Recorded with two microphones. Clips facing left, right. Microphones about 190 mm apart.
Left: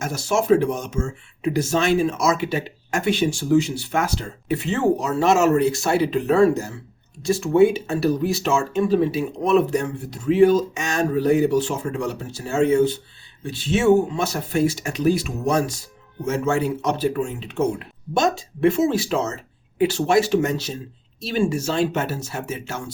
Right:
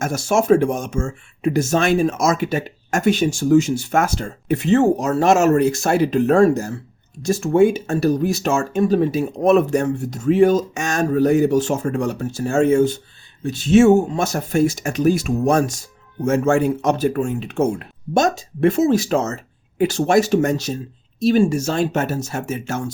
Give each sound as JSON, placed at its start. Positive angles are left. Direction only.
{"t": 0.0, "sound": "speech", "side_deg": -50}